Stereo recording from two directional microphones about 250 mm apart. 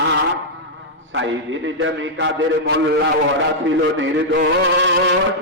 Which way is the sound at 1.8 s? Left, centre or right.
Right.